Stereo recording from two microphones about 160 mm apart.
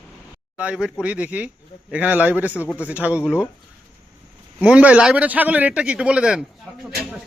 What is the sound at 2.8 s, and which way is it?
Speech, 10° right (ahead or behind).